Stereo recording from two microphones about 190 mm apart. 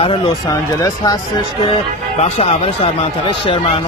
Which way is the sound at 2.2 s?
35° left (ahead or behind).